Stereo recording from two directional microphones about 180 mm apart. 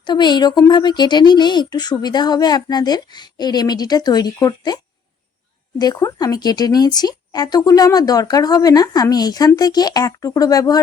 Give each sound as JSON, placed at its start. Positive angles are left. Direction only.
{"t": 0.0, "sound": "speech", "side_deg": 25}
{"t": 5.8, "sound": "speech", "side_deg": 20}